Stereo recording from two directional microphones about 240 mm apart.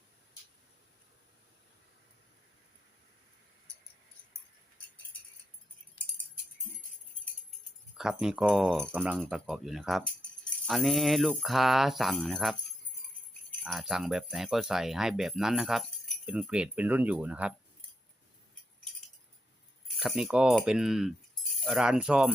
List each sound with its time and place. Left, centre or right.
6.0 s a sound: centre
7.9 s speech: centre
13.7 s speech: centre
20.0 s speech: centre